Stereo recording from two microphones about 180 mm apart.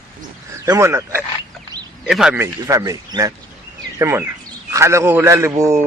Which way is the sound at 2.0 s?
5° right (ahead or behind).